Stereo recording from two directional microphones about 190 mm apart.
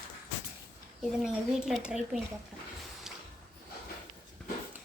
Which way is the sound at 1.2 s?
Centre (ahead or behind).